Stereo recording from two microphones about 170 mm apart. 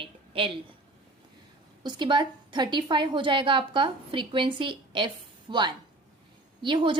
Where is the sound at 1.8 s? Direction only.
25° right (ahead or behind).